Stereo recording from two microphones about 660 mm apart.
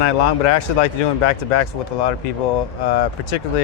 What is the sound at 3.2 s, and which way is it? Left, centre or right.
Speech, left.